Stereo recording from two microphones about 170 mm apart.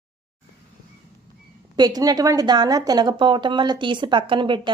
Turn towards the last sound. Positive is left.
turn(degrees=-30)  # may be behind; listen again after turning